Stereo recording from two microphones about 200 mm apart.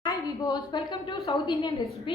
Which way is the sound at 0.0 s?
20° left (ahead or behind).